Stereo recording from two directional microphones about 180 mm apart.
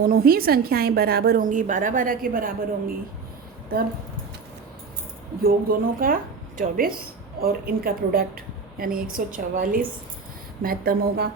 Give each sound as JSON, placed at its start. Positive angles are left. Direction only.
{"t": 0.0, "sound": "a woman's voice", "side_deg": -55}
{"t": 5.4, "sound": "a woman's voice", "side_deg": -55}